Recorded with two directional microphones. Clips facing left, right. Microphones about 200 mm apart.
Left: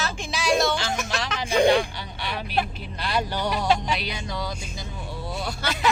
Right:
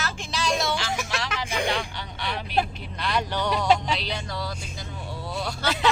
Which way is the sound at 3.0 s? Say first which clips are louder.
Even; 10° left (ahead or behind).